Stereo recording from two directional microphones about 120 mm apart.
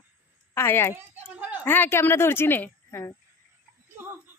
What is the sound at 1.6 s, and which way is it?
Speech, 15° left (ahead or behind).